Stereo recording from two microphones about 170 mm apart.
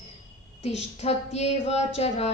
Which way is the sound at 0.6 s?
40° left (ahead or behind).